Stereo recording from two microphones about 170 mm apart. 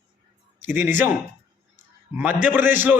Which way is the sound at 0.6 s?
10° right (ahead or behind).